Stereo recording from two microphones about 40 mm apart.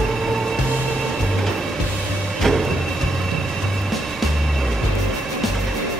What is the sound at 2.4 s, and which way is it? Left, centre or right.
Music, centre.